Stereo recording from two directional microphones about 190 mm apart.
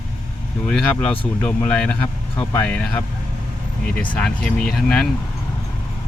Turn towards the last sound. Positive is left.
turn(degrees=5)  # may be behind; listen again after turning